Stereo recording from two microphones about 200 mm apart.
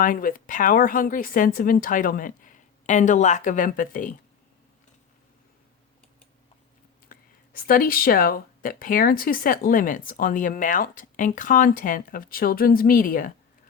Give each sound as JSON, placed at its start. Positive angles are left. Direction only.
{"t": 0.0, "sound": "speech", "side_deg": 40}
{"t": 7.1, "sound": "speech", "side_deg": 45}